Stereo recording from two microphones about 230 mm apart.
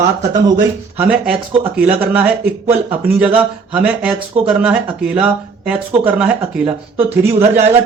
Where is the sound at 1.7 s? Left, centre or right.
Centre.